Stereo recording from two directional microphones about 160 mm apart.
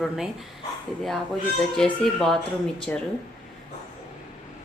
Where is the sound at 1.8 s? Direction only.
5° left (ahead or behind).